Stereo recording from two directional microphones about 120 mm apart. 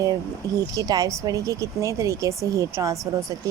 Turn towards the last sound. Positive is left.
turn(degrees=-25)  # may be behind; listen again after turning